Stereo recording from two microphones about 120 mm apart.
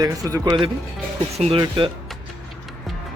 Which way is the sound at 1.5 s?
40° right (ahead or behind).